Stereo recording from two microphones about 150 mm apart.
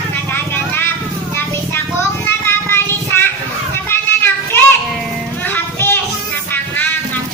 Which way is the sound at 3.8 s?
15° left (ahead or behind).